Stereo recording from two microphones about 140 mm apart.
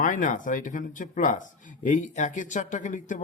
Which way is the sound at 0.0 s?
70° left (ahead or behind).